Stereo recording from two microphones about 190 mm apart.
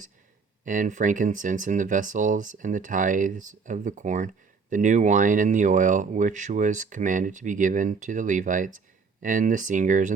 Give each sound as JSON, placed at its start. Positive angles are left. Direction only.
{"t": 0.6, "sound": "speech", "side_deg": -40}